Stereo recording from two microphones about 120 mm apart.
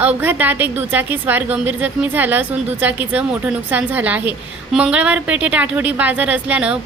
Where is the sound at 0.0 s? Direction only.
15° right (ahead or behind).